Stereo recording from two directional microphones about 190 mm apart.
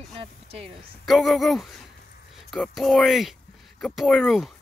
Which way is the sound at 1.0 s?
Centre (ahead or behind).